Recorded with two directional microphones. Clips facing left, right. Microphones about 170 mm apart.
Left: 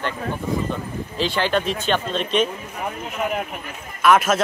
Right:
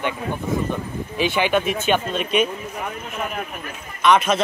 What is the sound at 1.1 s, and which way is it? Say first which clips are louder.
Speech: right 2 dB; 15° right (ahead or behind).